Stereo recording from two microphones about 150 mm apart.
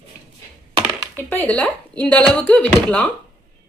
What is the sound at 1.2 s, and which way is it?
Speech, 10° left (ahead or behind).